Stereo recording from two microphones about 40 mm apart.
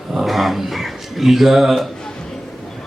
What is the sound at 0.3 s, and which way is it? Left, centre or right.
A man's voice, centre.